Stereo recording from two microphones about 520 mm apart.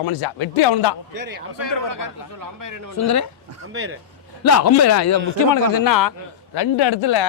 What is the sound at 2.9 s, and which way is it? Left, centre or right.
Speech, left.